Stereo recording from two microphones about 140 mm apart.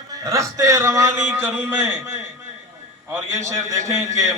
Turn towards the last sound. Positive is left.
turn(degrees=-20)  # may be behind; listen again after turning